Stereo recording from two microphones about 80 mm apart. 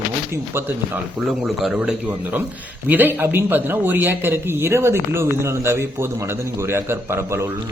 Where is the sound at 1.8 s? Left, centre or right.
Centre.